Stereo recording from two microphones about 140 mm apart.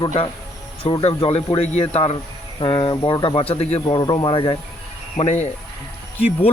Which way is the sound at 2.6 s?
30° left (ahead or behind).